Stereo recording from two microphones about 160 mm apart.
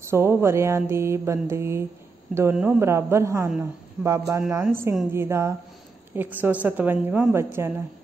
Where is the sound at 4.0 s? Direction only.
5° right (ahead or behind).